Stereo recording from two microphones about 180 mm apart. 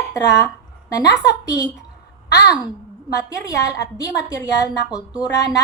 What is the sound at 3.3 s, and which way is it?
A woman's voice, 20° left (ahead or behind).